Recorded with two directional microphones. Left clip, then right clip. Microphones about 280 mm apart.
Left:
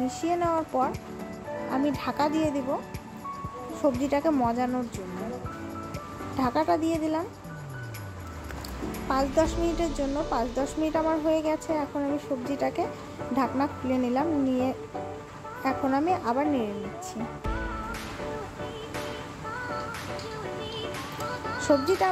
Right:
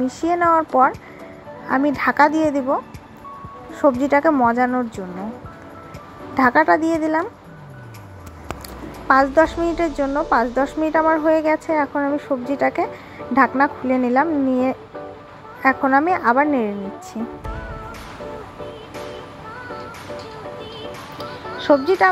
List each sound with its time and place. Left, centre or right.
0.2 s a woman's voice: centre
2.0 s speech: right
3.8 s a woman's voice: centre
6.3 s speech: centre
9.0 s a woman's voice: centre
21.5 s speech: centre